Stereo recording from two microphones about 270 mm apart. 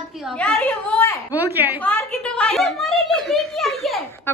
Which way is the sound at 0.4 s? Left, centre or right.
Centre.